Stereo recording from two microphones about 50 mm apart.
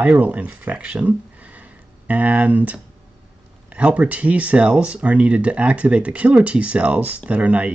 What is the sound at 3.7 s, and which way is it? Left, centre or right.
Speech, right.